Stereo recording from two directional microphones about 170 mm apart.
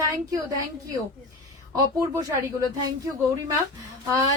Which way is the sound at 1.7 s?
20° right (ahead or behind).